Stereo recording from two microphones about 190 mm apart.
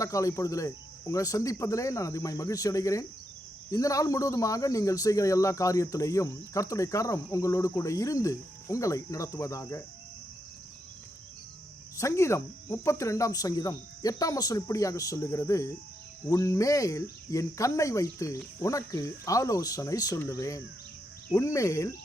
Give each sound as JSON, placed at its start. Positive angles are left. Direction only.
{"t": 0.0, "sound": "speech", "side_deg": 15}
{"t": 11.9, "sound": "speech", "side_deg": 15}